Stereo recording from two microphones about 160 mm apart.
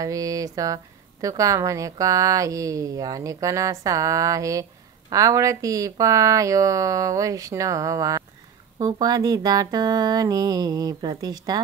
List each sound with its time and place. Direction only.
0.0 s speech: 20° right (ahead or behind)